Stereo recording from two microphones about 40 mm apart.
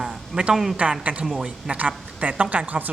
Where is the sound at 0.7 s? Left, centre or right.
Right.